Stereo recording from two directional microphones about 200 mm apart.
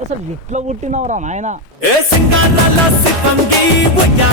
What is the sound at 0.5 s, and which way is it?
A woman's voice, 35° right (ahead or behind).